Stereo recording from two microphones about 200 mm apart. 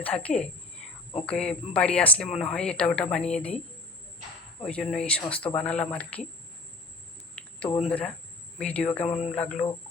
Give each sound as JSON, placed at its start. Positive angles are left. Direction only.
{"t": 0.0, "sound": "speech", "side_deg": 5}
{"t": 4.6, "sound": "speech", "side_deg": 0}
{"t": 7.6, "sound": "speech", "side_deg": 25}
{"t": 7.9, "sound": "speech", "side_deg": 5}
{"t": 9.0, "sound": "speech", "side_deg": 30}
{"t": 9.3, "sound": "speech", "side_deg": 5}